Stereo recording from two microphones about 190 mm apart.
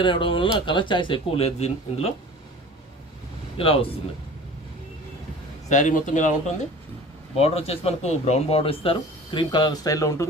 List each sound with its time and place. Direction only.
0.0 s speech: 25° left (ahead or behind)
3.6 s speech: 30° left (ahead or behind)
5.6 s a man's voice: 40° left (ahead or behind)
7.3 s speech: 35° left (ahead or behind); by 10.2 s 15° left (ahead or behind)